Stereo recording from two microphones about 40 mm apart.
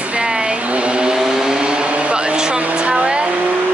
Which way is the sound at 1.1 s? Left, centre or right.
Centre.